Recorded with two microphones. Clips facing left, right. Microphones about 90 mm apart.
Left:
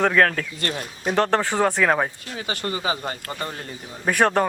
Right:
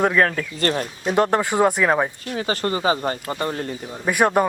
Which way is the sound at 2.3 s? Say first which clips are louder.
Right 5 dB; 35° right (ahead or behind).